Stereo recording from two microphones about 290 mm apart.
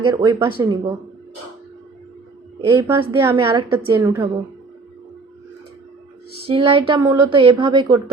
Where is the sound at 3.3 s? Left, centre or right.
Centre.